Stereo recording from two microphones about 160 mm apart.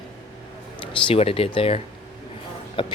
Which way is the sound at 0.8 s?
35° left (ahead or behind).